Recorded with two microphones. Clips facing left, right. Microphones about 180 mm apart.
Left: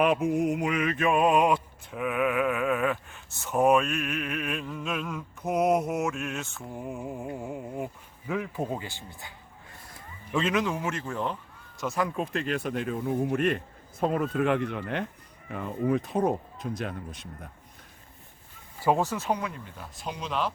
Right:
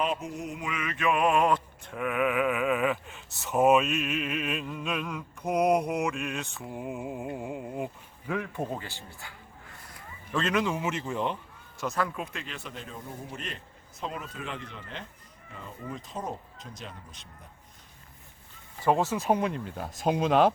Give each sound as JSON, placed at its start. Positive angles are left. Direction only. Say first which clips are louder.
{"t": 0.0, "sound": "a sound", "louder": "left 8 dB", "side_deg": 60}
{"t": 8.3, "sound": "speech", "louder": "left 1 dB", "side_deg": 5}
{"t": 10.3, "sound": "a sound", "louder": "left 1 dB", "side_deg": 5}
{"t": 10.7, "sound": "speech", "louder": "even", "side_deg": -10}
{"t": 12.1, "sound": "speech", "louder": "left 9 dB", "side_deg": 40}
{"t": 19.1, "sound": "speech", "louder": "right 3 dB", "side_deg": -20}
{"t": 19.7, "sound": "speech", "louder": "right 10 dB", "side_deg": -50}